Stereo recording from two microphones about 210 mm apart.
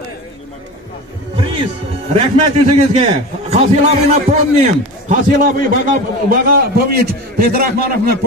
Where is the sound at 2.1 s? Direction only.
30° right (ahead or behind).